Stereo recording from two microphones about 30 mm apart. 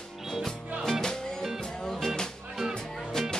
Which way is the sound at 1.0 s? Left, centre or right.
Centre.